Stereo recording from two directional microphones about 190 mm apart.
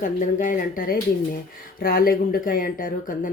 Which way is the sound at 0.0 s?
45° left (ahead or behind).